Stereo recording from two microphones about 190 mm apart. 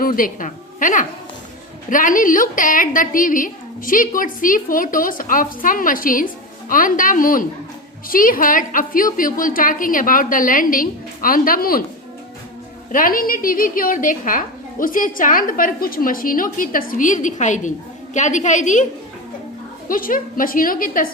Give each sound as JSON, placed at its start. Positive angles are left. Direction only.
{"t": 0.0, "sound": "a woman's voice", "side_deg": 45}
{"t": 12.9, "sound": "a woman's voice", "side_deg": 45}
{"t": 19.9, "sound": "a woman's voice", "side_deg": 45}